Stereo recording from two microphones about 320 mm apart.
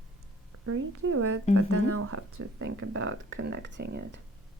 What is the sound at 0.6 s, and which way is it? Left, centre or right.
Speech, right.